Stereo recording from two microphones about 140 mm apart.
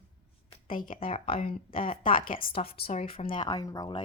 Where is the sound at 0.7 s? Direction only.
75° left (ahead or behind).